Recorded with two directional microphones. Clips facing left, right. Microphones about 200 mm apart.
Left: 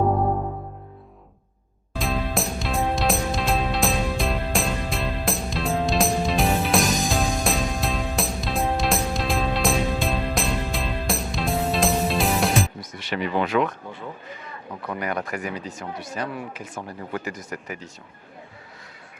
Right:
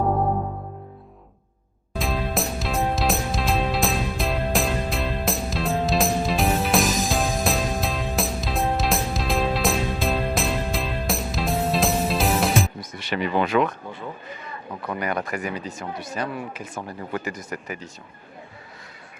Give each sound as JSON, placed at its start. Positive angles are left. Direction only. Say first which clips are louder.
{"t": 2.0, "sound": "music", "louder": "even", "side_deg": 0}
{"t": 13.1, "sound": "speech", "louder": "right 1 dB", "side_deg": -15}
{"t": 15.0, "sound": "speech", "louder": "right 1 dB", "side_deg": -15}